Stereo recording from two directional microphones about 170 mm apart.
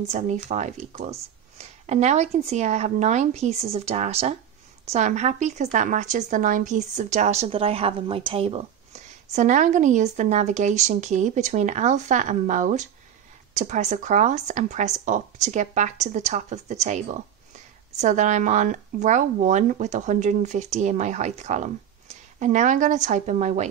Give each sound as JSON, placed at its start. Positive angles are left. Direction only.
{"t": 0.2, "sound": "a woman's voice", "side_deg": -40}